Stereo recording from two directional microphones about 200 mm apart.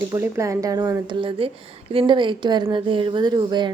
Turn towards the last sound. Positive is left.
turn(degrees=-20)  # may be behind; listen again after turning